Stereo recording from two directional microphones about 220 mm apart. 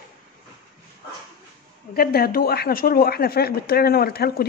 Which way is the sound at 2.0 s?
45° left (ahead or behind).